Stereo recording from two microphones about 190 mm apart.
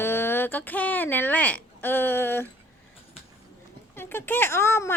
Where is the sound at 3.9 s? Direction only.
10° left (ahead or behind).